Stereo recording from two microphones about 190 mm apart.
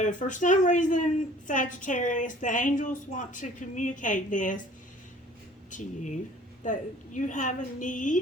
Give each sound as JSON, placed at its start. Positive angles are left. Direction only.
{"t": 0.0, "sound": "a woman's voice", "side_deg": 40}
{"t": 5.7, "sound": "a woman's voice", "side_deg": 40}